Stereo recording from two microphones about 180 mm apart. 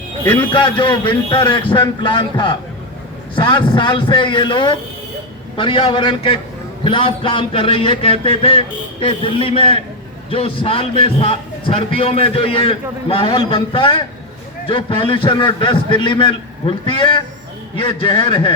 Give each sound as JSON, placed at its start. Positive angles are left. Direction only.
{"t": 0.5, "sound": "a man's voice", "side_deg": 25}